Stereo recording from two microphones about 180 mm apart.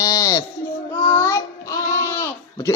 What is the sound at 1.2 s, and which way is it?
Child singing, 15° left (ahead or behind).